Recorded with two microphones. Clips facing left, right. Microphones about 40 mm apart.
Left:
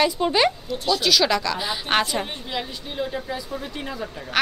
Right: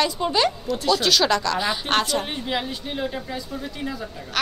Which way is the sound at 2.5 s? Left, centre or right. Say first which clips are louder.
Right 3 dB; centre.